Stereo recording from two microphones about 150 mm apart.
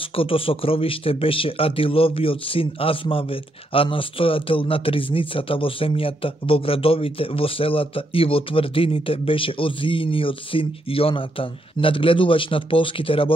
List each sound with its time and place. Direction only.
0.1 s speech: 40° left (ahead or behind)